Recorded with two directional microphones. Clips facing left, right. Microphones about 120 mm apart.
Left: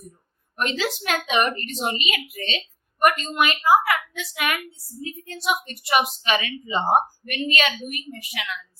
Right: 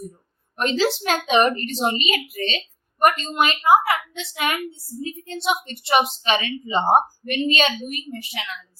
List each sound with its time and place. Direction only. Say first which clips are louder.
0.5 s a woman's voice: right 5 dB; 30° right (ahead or behind)